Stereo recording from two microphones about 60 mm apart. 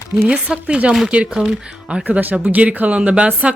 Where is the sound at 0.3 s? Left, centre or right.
Centre.